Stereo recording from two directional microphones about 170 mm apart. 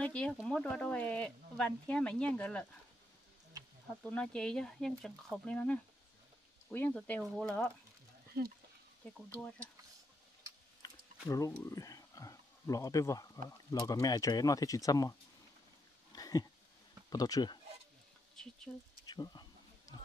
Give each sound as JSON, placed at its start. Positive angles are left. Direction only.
{"t": 0.0, "sound": "speech", "side_deg": 5}
{"t": 4.0, "sound": "speech", "side_deg": 5}
{"t": 8.3, "sound": "speech", "side_deg": -70}
{"t": 9.4, "sound": "speech", "side_deg": 10}
{"t": 10.8, "sound": "speech", "side_deg": 20}
{"t": 16.1, "sound": "a sound", "side_deg": 20}
{"t": 17.1, "sound": "speech", "side_deg": 20}
{"t": 18.3, "sound": "a sound", "side_deg": 5}
{"t": 19.0, "sound": "speech", "side_deg": 25}